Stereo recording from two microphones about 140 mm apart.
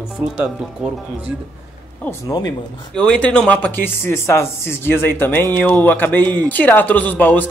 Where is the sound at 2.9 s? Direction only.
5° left (ahead or behind).